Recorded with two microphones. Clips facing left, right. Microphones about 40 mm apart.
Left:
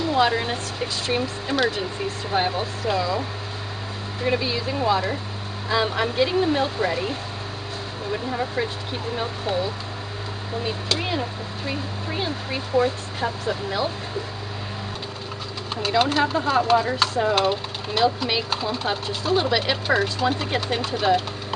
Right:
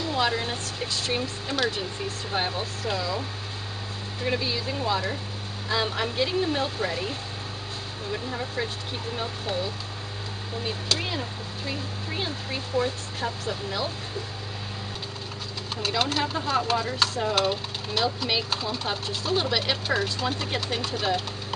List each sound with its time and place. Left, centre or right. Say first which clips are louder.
0.0 s speech: left 5 dB; centre
15.7 s speech: left 6 dB; centre